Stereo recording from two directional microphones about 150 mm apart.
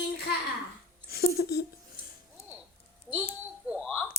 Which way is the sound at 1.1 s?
90° left.